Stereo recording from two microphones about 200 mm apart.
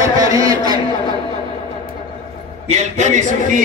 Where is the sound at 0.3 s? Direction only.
20° right (ahead or behind).